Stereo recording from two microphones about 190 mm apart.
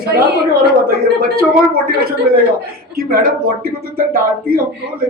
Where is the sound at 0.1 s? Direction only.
55° right (ahead or behind).